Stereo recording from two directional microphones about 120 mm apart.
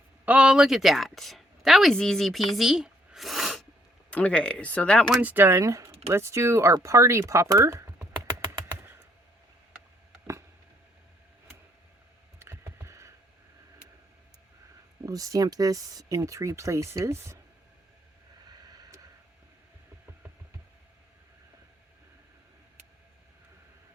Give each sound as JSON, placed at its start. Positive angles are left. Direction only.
{"t": 0.3, "sound": "speech", "side_deg": -10}
{"t": 4.1, "sound": "speech", "side_deg": 10}
{"t": 5.2, "sound": "speech", "side_deg": -15}
{"t": 8.7, "sound": "computer keyboard", "side_deg": -20}
{"t": 12.4, "sound": "computer keyboard", "side_deg": -20}
{"t": 15.0, "sound": "speech", "side_deg": -30}
{"t": 18.7, "sound": "a sound", "side_deg": -30}